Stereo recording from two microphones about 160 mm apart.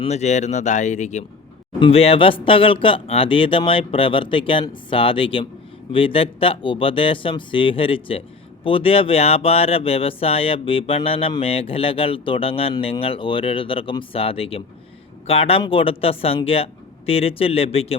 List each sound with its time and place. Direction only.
0.0 s speech: 45° left (ahead or behind)
1.8 s speech: 35° left (ahead or behind)